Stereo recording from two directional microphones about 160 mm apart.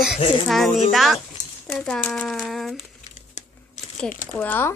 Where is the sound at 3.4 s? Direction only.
50° left (ahead or behind).